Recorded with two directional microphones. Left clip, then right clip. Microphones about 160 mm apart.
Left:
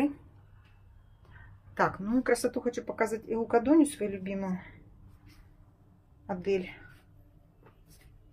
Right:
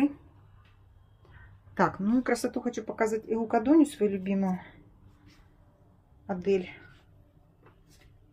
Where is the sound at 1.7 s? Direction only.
15° right (ahead or behind).